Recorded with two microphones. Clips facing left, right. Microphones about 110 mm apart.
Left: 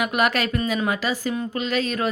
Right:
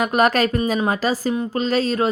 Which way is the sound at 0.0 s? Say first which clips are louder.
Right 5 dB; 40° right (ahead or behind).